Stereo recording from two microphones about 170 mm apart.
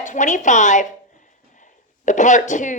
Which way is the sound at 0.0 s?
45° left (ahead or behind).